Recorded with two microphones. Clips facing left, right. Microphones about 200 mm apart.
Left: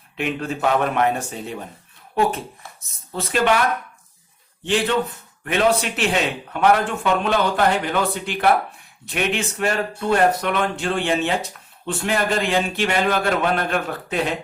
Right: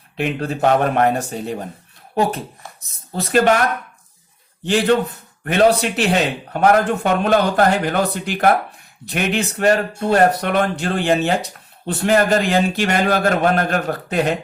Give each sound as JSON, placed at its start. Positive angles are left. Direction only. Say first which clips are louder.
{"t": 0.2, "sound": "a man's voice", "louder": "right 4 dB", "side_deg": -40}
{"t": 4.6, "sound": "a man's voice", "louder": "right 4 dB", "side_deg": -40}